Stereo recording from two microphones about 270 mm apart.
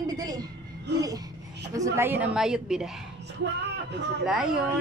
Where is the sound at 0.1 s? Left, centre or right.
Centre.